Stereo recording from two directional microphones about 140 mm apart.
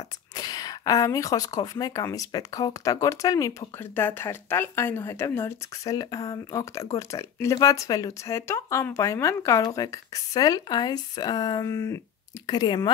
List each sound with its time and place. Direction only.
0.3 s speech: 30° left (ahead or behind)
12.4 s speech: 30° left (ahead or behind)